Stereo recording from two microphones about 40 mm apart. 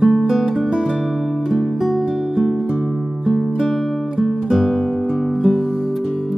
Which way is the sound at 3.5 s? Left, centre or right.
Centre.